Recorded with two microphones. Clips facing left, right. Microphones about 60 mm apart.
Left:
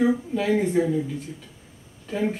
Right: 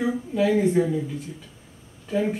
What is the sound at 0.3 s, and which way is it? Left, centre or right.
Speech, centre.